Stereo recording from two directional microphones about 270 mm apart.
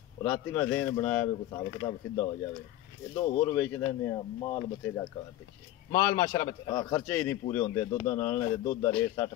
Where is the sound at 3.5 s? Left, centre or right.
Centre.